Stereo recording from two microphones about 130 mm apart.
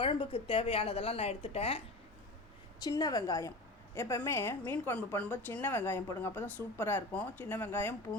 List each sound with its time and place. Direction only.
0.0 s a woman's voice: 40° left (ahead or behind)
2.8 s a woman's voice: 30° left (ahead or behind)